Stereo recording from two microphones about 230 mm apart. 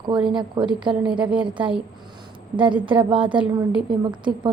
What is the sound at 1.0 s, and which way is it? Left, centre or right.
Speech, centre.